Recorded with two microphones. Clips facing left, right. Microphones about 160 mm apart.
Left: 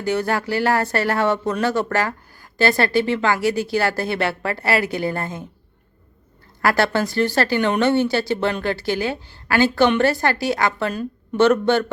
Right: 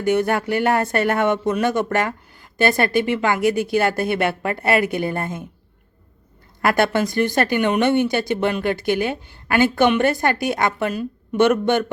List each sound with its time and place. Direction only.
0.0 s a woman's voice: 20° right (ahead or behind)
6.6 s a woman's voice: 20° right (ahead or behind)